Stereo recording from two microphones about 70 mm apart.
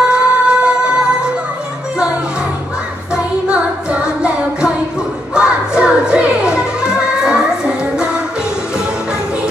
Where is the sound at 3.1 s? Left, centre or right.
Centre.